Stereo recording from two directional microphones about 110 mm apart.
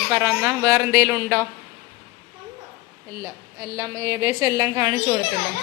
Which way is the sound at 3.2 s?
30° right (ahead or behind).